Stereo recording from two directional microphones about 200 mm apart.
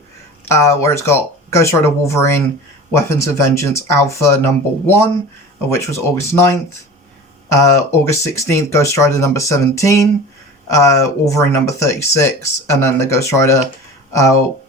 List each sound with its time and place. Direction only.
0.4 s speech: 15° left (ahead or behind)